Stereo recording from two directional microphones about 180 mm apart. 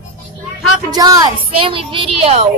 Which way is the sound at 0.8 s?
20° right (ahead or behind).